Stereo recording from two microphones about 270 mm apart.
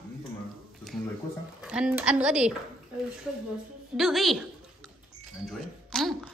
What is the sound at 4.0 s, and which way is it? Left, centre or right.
Speech, centre.